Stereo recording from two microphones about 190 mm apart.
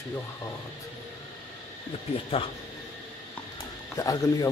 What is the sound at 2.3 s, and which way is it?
Speech, 30° left (ahead or behind).